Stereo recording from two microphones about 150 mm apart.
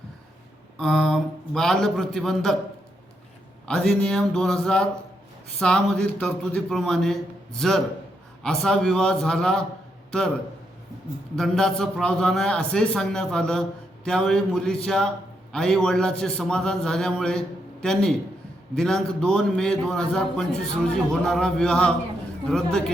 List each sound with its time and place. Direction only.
0.8 s a man's voice: centre (ahead or behind)
3.7 s a man's voice: 5° left (ahead or behind)
11.3 s a man's voice: 5° left (ahead or behind)